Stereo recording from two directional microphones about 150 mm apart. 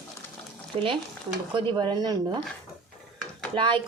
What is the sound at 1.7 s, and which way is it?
Speech, 30° right (ahead or behind).